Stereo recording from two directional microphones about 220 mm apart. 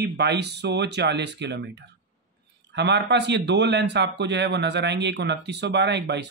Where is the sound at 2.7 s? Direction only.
50° right (ahead or behind).